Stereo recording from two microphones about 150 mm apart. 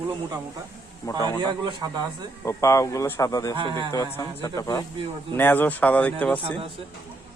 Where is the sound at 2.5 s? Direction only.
20° left (ahead or behind).